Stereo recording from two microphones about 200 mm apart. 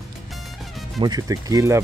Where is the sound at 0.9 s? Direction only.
20° right (ahead or behind).